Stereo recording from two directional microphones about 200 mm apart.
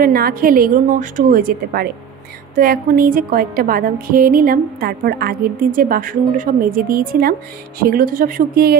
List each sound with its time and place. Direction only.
0.0 s a woman's voice: 45° right (ahead or behind)